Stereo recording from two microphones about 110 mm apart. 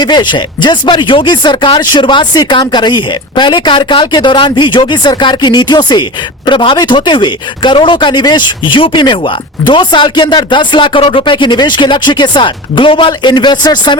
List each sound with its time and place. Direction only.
0.0 s speech: 45° left (ahead or behind)